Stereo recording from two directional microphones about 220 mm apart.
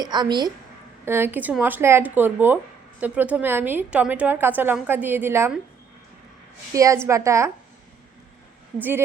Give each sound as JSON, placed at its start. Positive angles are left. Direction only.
{"t": 0.0, "sound": "a woman's voice", "side_deg": -20}
{"t": 6.7, "sound": "a woman's voice", "side_deg": -15}
{"t": 8.8, "sound": "a woman's voice", "side_deg": -10}